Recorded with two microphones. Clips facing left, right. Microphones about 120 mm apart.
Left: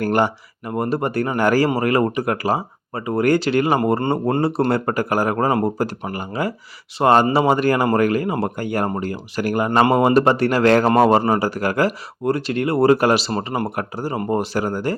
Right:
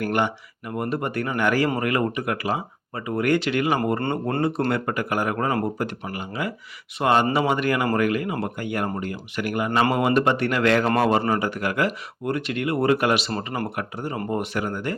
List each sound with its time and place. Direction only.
0.0 s speech: 35° left (ahead or behind)